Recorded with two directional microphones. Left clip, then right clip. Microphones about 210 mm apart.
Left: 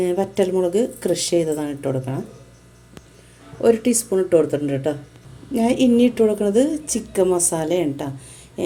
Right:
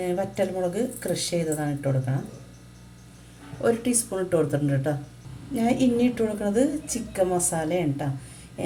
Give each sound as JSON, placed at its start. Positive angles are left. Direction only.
{"t": 0.0, "sound": "a woman's voice", "side_deg": 40}
{"t": 3.6, "sound": "a woman's voice", "side_deg": 35}